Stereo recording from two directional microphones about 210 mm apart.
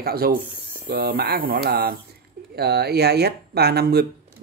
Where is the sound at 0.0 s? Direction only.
45° right (ahead or behind).